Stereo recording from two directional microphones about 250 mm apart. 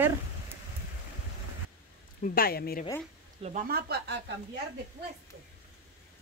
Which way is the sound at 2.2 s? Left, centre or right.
Left.